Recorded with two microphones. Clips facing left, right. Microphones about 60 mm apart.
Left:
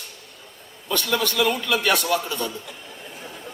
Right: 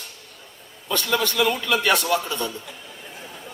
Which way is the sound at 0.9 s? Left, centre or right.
Right.